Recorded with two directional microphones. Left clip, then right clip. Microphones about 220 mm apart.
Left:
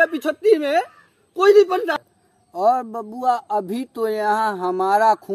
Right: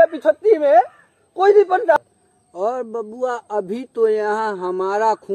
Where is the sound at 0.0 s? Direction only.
50° left (ahead or behind).